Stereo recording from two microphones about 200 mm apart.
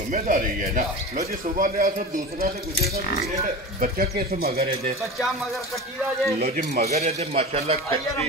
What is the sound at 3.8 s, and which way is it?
Speech, 45° right (ahead or behind).